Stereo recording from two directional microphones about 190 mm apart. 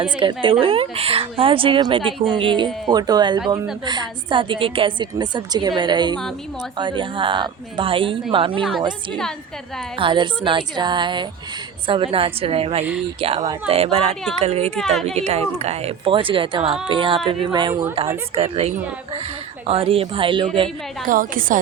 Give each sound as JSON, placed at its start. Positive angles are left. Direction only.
{"t": 0.0, "sound": "a woman's voice", "side_deg": -25}
{"t": 10.0, "sound": "a woman's voice", "side_deg": -25}
{"t": 14.8, "sound": "a woman's voice", "side_deg": 0}
{"t": 15.0, "sound": "a woman's voice", "side_deg": -35}
{"t": 18.3, "sound": "a woman's voice", "side_deg": -30}
{"t": 21.1, "sound": "a woman's voice", "side_deg": -45}